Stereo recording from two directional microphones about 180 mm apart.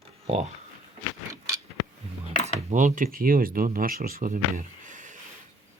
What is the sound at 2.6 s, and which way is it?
Speech, 45° right (ahead or behind).